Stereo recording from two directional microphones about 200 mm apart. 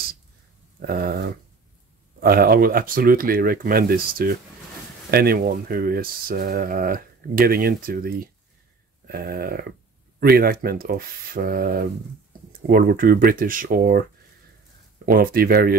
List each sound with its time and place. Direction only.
0.7 s speech: 50° right (ahead or behind)
15.0 s speech: 45° right (ahead or behind)